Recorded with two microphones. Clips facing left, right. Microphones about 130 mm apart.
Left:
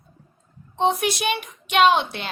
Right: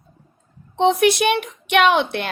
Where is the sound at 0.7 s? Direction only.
65° right (ahead or behind).